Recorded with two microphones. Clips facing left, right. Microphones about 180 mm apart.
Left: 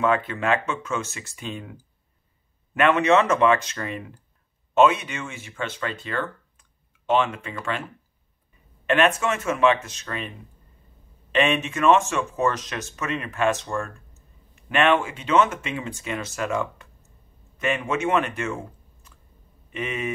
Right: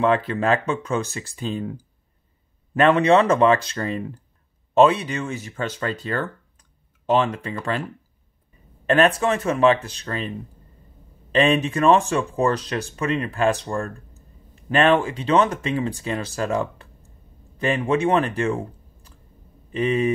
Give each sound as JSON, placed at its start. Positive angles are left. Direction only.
{"t": 0.0, "sound": "speech", "side_deg": -35}
{"t": 8.8, "sound": "speech", "side_deg": -35}
{"t": 11.3, "sound": "speech", "side_deg": -35}